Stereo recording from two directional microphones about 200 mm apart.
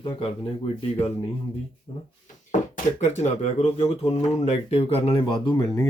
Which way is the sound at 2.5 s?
35° left (ahead or behind).